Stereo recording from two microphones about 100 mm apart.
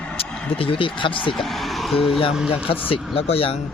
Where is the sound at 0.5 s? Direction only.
65° left (ahead or behind).